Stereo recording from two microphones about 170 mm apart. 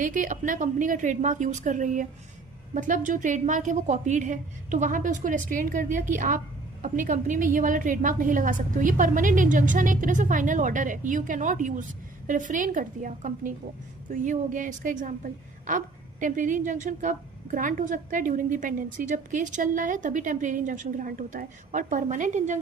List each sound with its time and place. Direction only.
0.0 s a woman's voice: 50° right (ahead or behind)